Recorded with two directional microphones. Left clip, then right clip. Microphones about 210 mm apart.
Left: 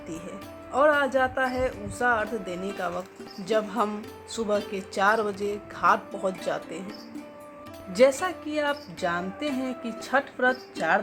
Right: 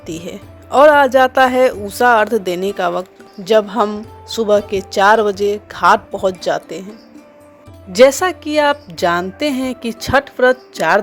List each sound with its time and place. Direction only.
0.0 s a woman's voice: 40° right (ahead or behind)
7.9 s a woman's voice: 45° right (ahead or behind)